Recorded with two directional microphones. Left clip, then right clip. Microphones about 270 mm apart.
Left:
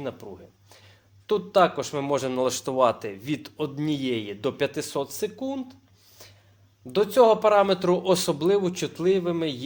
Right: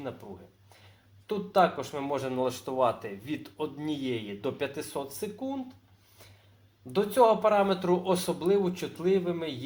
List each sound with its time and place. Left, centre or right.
1.3 s speech: left
6.2 s a sound: left
6.9 s speech: left